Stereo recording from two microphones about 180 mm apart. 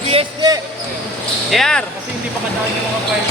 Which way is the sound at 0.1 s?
25° right (ahead or behind).